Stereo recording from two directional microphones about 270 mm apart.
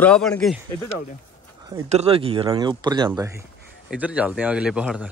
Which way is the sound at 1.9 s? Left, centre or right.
Right.